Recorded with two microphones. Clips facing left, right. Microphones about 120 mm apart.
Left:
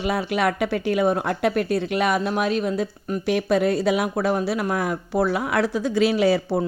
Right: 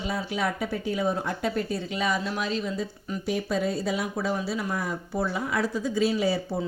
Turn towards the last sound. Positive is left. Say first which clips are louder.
# left 7 dB
turn(degrees=80)